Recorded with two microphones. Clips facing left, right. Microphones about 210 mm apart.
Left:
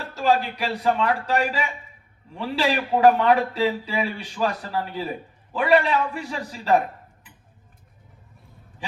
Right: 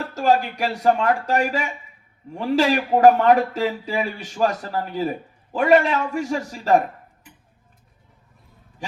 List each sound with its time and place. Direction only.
0.1 s speech: 45° right (ahead or behind)